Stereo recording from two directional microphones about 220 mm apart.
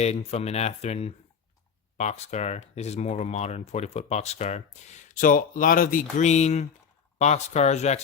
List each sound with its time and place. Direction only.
0.0 s speech: 30° left (ahead or behind)